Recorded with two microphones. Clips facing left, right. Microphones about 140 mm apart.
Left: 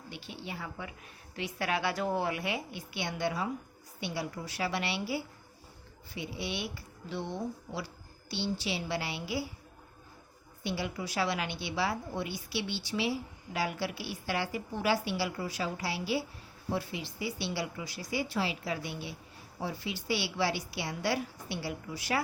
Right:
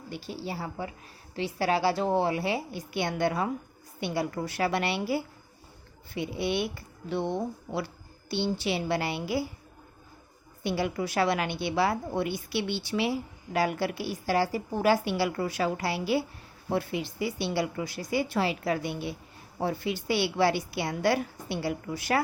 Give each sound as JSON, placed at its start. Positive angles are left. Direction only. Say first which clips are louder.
{"t": 0.1, "sound": "a woman's voice", "louder": "right 7 dB", "side_deg": -40}
{"t": 2.9, "sound": "a woman's voice", "louder": "right 6 dB", "side_deg": -50}
{"t": 10.6, "sound": "a woman's voice", "louder": "right 6 dB", "side_deg": -55}